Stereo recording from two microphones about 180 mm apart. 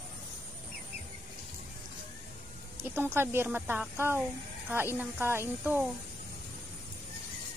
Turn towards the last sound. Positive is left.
turn(degrees=-10)  # may be behind; listen again after turning